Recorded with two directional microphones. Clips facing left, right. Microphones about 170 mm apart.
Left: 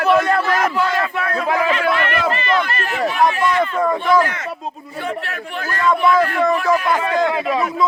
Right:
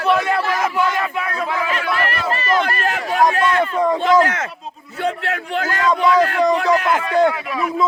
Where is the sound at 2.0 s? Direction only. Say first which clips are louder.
Left 2 dB; 40° right (ahead or behind).